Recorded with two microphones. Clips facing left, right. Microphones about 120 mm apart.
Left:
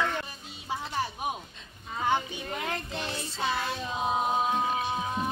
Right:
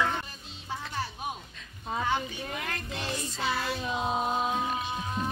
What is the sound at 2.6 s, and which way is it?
Music, 20° left (ahead or behind).